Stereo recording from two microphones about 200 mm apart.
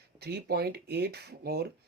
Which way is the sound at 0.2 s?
50° right (ahead or behind).